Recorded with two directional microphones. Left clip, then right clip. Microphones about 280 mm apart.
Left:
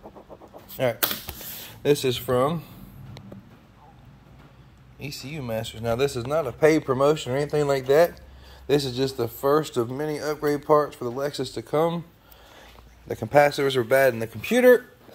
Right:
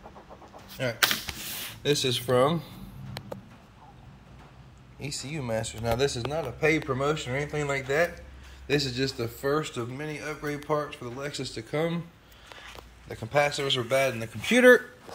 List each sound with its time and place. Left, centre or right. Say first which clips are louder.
0.8 s a man's voice: left 1 dB; centre
5.3 s speech: left 1 dB; centre
5.7 s speech: left 4 dB; left
8.6 s a man's voice: left 4 dB; centre
13.1 s speech: left 7 dB; left